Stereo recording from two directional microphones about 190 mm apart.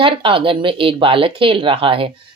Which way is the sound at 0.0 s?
25° right (ahead or behind).